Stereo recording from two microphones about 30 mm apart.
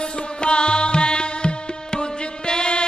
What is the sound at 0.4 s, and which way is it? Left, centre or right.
Music, left.